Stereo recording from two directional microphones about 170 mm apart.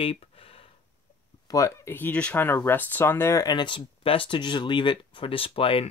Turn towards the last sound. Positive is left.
turn(degrees=35)  # may be behind; listen again after turning